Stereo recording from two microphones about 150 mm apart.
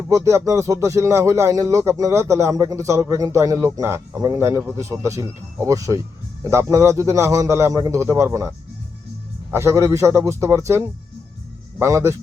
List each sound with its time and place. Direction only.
0.1 s speech: 20° right (ahead or behind)
9.5 s speech: 20° right (ahead or behind)